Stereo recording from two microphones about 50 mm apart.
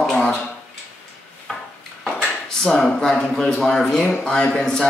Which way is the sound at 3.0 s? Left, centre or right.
Centre.